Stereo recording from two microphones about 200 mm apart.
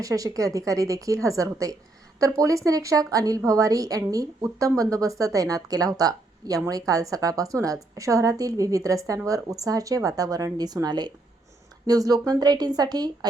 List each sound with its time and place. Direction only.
0.0 s a woman's voice: 15° right (ahead or behind)